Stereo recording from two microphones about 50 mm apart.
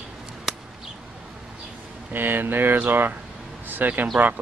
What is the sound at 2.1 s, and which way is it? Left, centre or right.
Speech, right.